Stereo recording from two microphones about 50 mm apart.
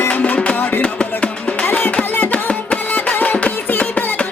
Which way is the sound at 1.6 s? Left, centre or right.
Left.